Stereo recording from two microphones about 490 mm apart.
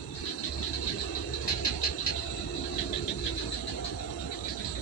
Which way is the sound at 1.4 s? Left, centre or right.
Left.